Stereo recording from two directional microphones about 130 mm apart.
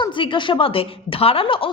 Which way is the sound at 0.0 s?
40° left (ahead or behind).